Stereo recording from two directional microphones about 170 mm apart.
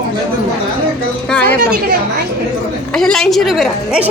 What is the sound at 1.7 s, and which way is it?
Speech, 65° right (ahead or behind).